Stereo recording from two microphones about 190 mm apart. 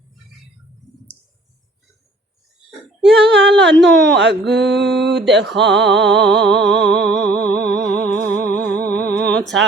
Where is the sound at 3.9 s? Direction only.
70° right (ahead or behind).